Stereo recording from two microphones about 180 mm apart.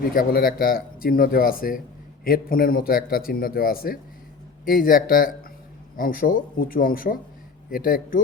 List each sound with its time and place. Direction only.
0.1 s speech: 50° left (ahead or behind)